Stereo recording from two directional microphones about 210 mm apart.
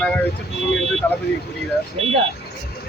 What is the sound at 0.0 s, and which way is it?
Speech, 5° left (ahead or behind).